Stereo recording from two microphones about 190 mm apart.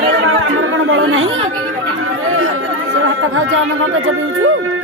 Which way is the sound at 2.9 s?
90° right.